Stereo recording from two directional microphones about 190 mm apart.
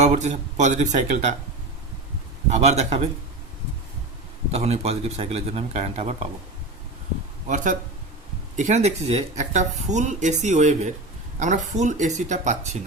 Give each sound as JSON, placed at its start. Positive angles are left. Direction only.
{"t": 0.0, "sound": "speech", "side_deg": -35}
{"t": 2.5, "sound": "speech", "side_deg": -35}
{"t": 4.5, "sound": "speech", "side_deg": -35}
{"t": 7.4, "sound": "speech", "side_deg": -40}